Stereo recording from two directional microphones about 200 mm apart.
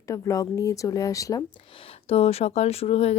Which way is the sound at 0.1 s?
15° left (ahead or behind).